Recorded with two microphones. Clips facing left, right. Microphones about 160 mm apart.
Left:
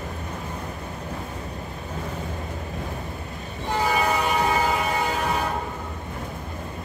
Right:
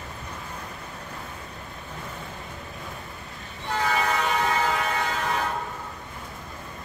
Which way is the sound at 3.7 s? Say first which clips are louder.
Left 2 dB; 10° left (ahead or behind).